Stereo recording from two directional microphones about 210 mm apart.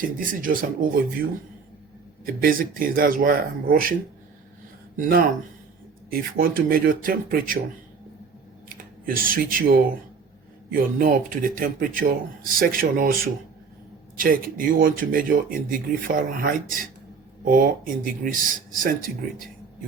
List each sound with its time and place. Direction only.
0.4 s speech: 40° right (ahead or behind)
4.9 s speech: 45° right (ahead or behind)
8.7 s speech: 45° right (ahead or behind)